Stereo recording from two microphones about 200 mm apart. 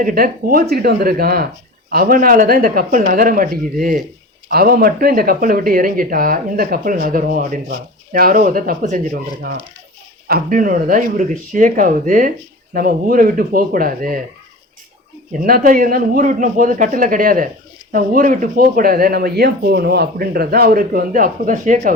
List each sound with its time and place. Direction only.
0.0 s speech: 45° right (ahead or behind)
10.2 s speech: 45° right (ahead or behind)
15.3 s speech: 45° right (ahead or behind)